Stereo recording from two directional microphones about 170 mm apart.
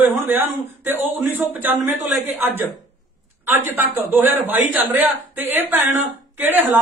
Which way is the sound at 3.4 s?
10° right (ahead or behind).